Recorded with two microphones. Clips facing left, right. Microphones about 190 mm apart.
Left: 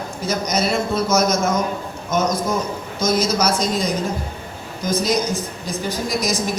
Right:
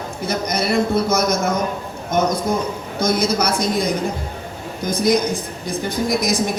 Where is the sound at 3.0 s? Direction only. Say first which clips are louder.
Even; 60° right (ahead or behind).